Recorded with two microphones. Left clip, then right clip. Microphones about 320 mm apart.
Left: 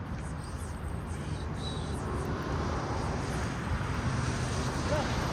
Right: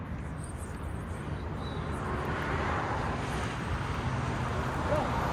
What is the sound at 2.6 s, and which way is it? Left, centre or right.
Vehicle, right.